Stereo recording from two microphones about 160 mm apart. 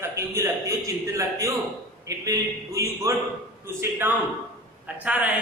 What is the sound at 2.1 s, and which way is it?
A man's voice, 20° right (ahead or behind).